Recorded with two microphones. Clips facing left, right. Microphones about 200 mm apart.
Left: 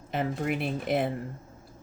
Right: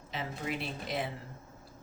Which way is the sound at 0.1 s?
55° left (ahead or behind).